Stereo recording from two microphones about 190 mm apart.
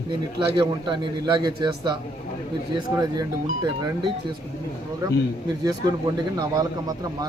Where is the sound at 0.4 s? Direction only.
25° right (ahead or behind).